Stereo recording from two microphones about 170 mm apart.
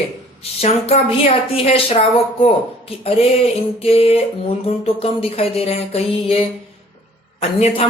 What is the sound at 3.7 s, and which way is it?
Speech, 35° left (ahead or behind).